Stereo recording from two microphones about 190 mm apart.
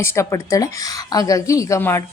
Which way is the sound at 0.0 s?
15° left (ahead or behind).